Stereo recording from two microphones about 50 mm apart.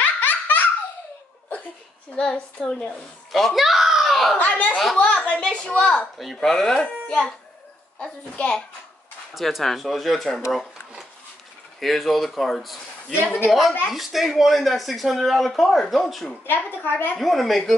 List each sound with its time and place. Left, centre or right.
0.2 s laughter: left
2.1 s a child's voice: centre
3.3 s a child's voice: centre
4.4 s a woman's voice: left
6.1 s a child's voice: centre
9.3 s speech: centre
11.8 s speech: centre
16.4 s a woman's voice: left
17.2 s speech: centre